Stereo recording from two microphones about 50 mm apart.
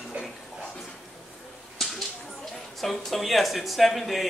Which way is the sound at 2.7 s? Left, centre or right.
Centre.